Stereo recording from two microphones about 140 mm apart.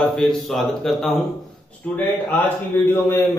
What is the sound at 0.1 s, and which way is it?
A man's voice, centre (ahead or behind).